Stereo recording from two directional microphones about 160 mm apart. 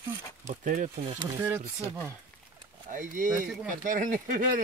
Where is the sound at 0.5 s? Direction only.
50° right (ahead or behind).